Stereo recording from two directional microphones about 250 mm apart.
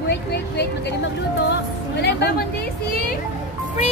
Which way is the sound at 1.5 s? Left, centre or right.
Left.